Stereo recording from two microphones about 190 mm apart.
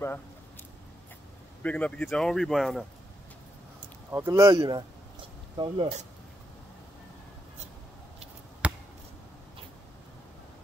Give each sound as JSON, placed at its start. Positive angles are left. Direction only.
{"t": 1.6, "sound": "speech", "side_deg": 5}
{"t": 4.1, "sound": "speech", "side_deg": -15}
{"t": 8.6, "sound": "chop", "side_deg": -5}